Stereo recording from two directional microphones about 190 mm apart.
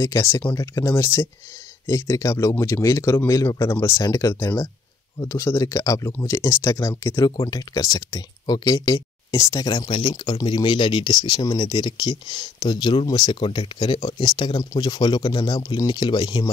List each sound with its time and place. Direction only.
0.0 s speech: 15° left (ahead or behind)